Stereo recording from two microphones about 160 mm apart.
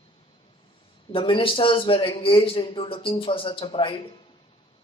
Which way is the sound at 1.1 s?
30° left (ahead or behind).